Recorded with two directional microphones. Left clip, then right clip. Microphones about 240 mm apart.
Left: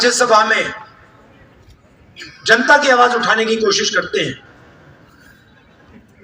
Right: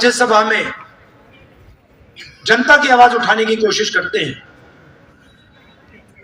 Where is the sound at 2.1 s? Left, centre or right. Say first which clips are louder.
Left 1 dB; centre.